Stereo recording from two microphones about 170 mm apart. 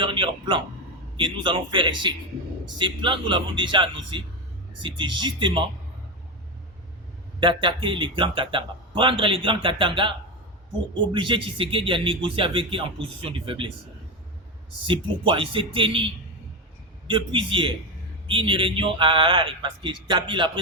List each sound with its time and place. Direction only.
0.0 s a sound: 30° right (ahead or behind)
1.1 s a man's voice: 30° right (ahead or behind)
7.3 s a man's voice: 30° right (ahead or behind)
14.8 s a man's voice: 30° right (ahead or behind)